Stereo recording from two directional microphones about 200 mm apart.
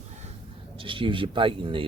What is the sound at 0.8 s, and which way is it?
Speech, 25° right (ahead or behind).